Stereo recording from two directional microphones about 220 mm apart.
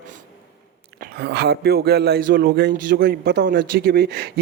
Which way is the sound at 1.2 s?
50° right (ahead or behind).